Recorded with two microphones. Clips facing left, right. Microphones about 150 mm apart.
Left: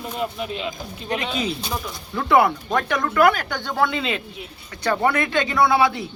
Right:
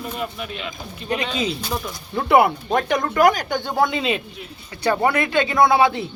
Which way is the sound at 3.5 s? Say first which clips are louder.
Right 2 dB; 15° right (ahead or behind).